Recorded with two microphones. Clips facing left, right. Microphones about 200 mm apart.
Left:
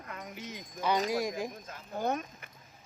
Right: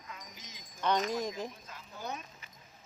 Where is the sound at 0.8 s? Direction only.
5° left (ahead or behind).